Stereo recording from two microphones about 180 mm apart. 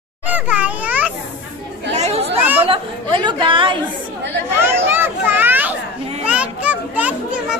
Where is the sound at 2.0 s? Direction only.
35° right (ahead or behind).